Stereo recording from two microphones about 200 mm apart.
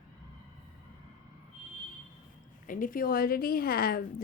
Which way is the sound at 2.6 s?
40° left (ahead or behind).